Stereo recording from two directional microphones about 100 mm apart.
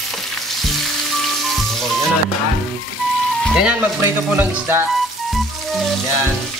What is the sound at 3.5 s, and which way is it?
Speech, 10° right (ahead or behind).